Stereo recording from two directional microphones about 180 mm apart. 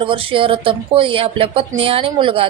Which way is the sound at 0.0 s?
30° right (ahead or behind).